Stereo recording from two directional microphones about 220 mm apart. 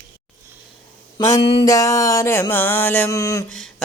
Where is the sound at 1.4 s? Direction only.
25° left (ahead or behind).